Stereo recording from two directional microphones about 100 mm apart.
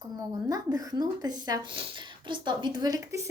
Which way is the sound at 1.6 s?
60° right (ahead or behind).